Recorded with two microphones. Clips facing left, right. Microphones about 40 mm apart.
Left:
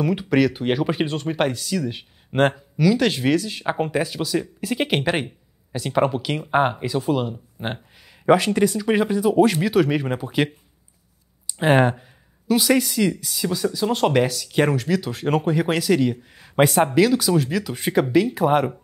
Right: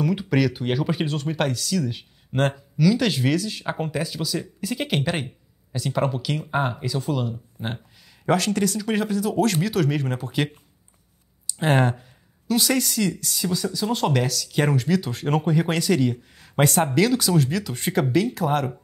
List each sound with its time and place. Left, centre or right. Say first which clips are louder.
0.0 s speech: left 3 dB; centre; by 7.0 s left
7.6 s speech: left 3 dB; left
8.3 s speech: left 5 dB; centre
11.6 s speech: left 4 dB; centre
14.6 s speech: left 2 dB; centre